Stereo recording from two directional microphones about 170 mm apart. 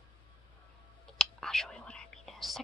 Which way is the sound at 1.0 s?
5° left (ahead or behind).